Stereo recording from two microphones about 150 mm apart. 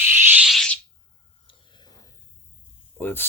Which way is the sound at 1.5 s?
30° left (ahead or behind).